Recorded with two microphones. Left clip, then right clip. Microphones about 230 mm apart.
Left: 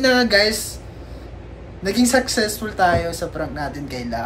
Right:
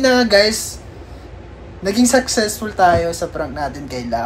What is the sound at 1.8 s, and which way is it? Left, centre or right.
Speech, centre.